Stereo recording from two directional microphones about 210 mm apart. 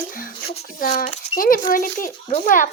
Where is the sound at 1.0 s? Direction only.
30° left (ahead or behind).